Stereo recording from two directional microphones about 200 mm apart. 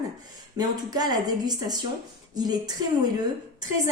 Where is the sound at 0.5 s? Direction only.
20° right (ahead or behind).